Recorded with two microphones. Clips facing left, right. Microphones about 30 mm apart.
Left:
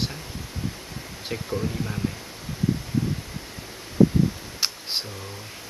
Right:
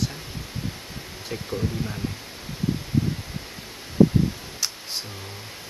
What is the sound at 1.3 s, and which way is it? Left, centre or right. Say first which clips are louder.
Speech: even; centre.